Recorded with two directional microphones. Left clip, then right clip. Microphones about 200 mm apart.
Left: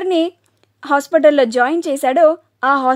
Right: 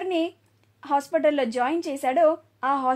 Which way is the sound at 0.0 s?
50° left (ahead or behind).